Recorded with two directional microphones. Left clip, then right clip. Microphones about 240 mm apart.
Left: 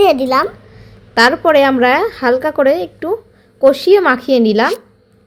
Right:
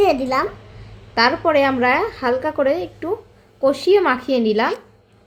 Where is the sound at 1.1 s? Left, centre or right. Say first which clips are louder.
Left 6 dB; left.